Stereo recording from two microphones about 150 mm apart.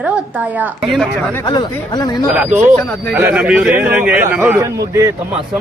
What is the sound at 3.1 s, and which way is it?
A woman's voice, 10° right (ahead or behind).